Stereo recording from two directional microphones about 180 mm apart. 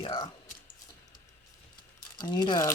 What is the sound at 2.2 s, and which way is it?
Speech, 25° left (ahead or behind).